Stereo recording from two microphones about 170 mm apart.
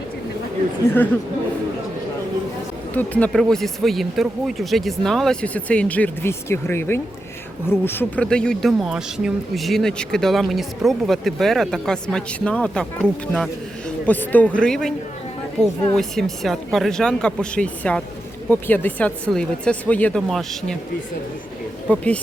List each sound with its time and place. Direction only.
2.9 s speech: 10° left (ahead or behind)
16.0 s speech: centre (ahead or behind)
21.8 s speech: 10° left (ahead or behind)